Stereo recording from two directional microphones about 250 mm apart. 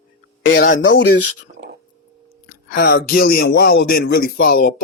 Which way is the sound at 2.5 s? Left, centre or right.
Left.